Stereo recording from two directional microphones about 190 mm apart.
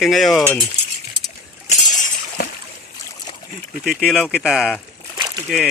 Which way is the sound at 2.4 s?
50° left (ahead or behind).